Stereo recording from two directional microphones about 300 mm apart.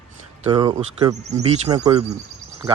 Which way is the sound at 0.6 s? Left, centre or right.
Centre.